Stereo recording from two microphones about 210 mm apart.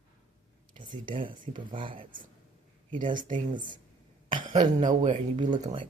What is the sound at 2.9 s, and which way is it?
Speech, 40° right (ahead or behind).